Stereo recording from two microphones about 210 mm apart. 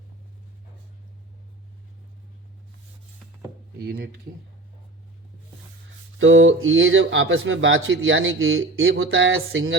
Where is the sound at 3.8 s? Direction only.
50° right (ahead or behind).